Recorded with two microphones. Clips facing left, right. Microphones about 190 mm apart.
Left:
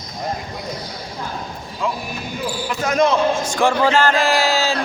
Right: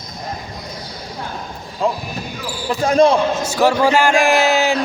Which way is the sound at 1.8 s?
35° right (ahead or behind).